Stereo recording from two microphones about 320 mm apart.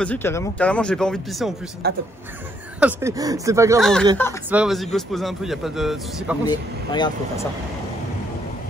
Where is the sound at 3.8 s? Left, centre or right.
Centre.